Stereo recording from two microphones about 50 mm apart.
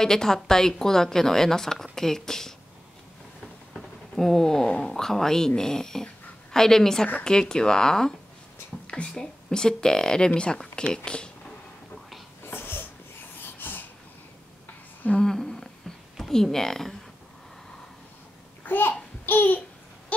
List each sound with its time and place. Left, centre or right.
0.0 s a woman's voice: centre
3.7 s a sound: centre
4.6 s speech: left
4.9 s a woman's voice: centre
12.4 s wheeze: left
13.4 s a sound: left
15.1 s speech: centre
18.6 s a child's voice: left
19.2 s babbling: left
20.1 s a sound: left